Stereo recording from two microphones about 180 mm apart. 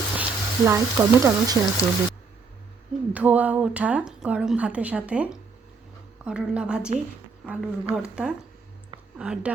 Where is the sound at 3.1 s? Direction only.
10° right (ahead or behind).